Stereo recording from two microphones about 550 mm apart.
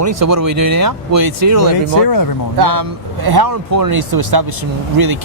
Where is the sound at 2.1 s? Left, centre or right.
Left.